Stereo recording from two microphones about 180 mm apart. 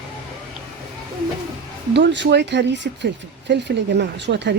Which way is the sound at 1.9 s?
75° right (ahead or behind).